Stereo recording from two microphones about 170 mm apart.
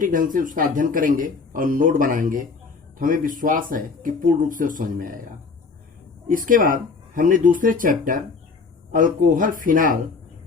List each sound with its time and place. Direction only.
0.0 s a man's voice: 55° right (ahead or behind)
6.2 s a man's voice: 55° right (ahead or behind)